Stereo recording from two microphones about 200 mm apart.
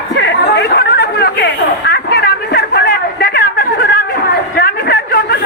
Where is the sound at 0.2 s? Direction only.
60° left (ahead or behind).